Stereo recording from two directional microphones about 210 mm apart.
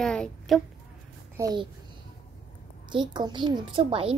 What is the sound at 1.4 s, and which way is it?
Speech, 20° right (ahead or behind).